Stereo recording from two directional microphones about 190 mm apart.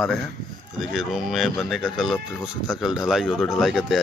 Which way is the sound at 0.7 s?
Centre (ahead or behind).